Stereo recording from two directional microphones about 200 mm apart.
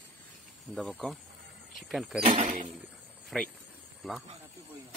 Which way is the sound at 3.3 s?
Centre (ahead or behind).